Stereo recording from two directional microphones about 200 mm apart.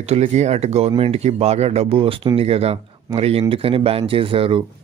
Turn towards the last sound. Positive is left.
turn(degrees=-25)  # may be behind; listen again after turning